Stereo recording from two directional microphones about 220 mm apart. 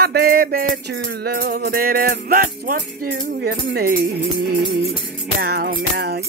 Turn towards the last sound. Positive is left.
turn(degrees=-45)  # may be behind; listen again after turning